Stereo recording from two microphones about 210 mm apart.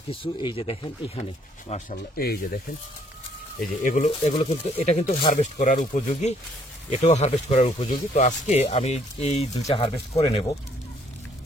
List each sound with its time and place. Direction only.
0.1 s speech: 25° left (ahead or behind)
1.7 s speech: 45° left (ahead or behind)
9.6 s speech: 15° left (ahead or behind)
10.1 s speech: 30° left (ahead or behind)